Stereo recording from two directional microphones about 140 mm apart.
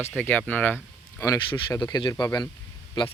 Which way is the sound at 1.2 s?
25° left (ahead or behind).